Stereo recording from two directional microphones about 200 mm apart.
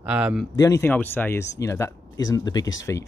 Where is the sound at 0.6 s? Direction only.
15° left (ahead or behind).